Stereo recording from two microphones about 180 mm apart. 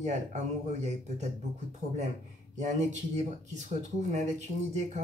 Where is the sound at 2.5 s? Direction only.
40° right (ahead or behind).